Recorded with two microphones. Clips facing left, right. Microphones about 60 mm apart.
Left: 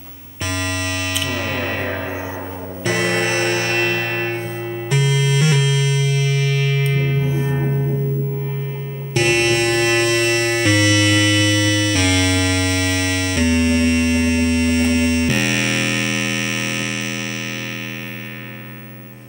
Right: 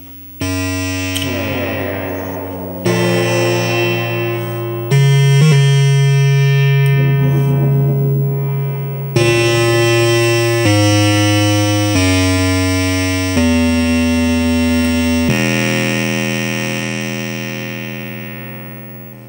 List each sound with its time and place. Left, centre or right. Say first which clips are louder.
1.3 s music: right 4 dB; right
3.0 s music: right 4 dB; left
4.8 s music: right 5 dB; right
7.5 s a sound: right 5 dB; centre
9.1 s music: right 4 dB; right